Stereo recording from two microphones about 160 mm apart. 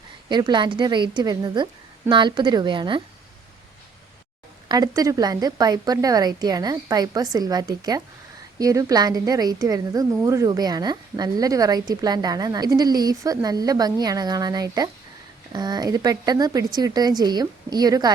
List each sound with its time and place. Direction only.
0.3 s a woman's voice: 30° right (ahead or behind)
4.7 s a woman's voice: 25° right (ahead or behind)